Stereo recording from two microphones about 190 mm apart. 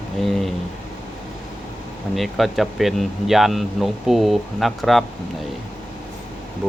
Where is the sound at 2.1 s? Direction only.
Centre (ahead or behind).